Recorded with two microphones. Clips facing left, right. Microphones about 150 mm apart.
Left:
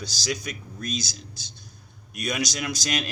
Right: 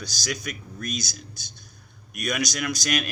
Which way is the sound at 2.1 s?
30° left (ahead or behind).